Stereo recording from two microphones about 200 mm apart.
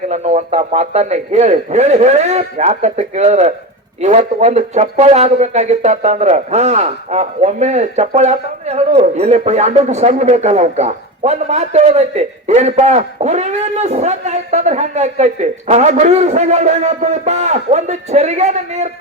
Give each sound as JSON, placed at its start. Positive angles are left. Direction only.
{"t": 0.1, "sound": "speech", "side_deg": -35}